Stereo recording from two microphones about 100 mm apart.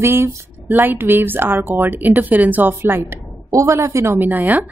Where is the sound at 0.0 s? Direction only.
25° right (ahead or behind).